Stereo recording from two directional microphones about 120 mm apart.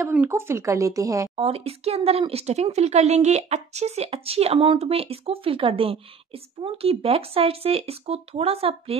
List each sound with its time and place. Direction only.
0.3 s speech: 20° right (ahead or behind)
1.3 s speech: 50° right (ahead or behind)